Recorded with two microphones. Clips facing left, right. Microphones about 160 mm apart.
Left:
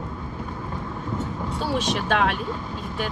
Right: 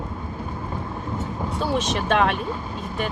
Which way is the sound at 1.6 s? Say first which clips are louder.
Right 1 dB; centre (ahead or behind).